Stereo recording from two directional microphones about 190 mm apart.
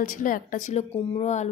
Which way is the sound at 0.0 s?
45° left (ahead or behind).